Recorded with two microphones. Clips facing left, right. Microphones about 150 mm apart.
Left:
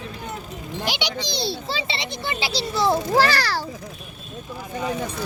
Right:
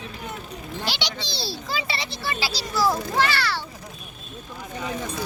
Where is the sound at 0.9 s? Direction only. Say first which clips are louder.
Left 5 dB; 10° left (ahead or behind).